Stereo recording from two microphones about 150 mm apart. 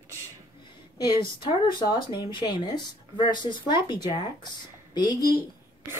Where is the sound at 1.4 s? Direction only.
35° left (ahead or behind).